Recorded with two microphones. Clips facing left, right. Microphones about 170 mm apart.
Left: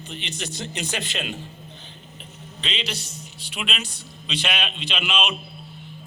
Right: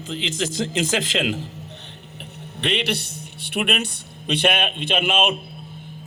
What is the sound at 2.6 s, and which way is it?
A man's voice, 60° right (ahead or behind).